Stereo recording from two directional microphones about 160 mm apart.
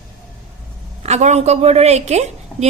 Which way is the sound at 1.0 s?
45° right (ahead or behind).